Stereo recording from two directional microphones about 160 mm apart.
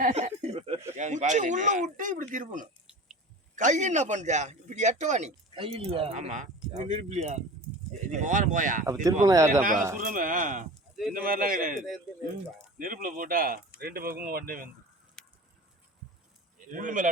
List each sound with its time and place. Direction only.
0.0 s a sound: 45° right (ahead or behind)
0.9 s a man's voice: 50° right (ahead or behind)
5.5 s a man's voice: 35° right (ahead or behind); by 8.8 s 55° right (ahead or behind)
9.2 s speech: 20° right (ahead or behind)
9.5 s speech: 55° right (ahead or behind)
15.2 s a sound: 5° left (ahead or behind)
16.7 s speech: 55° right (ahead or behind)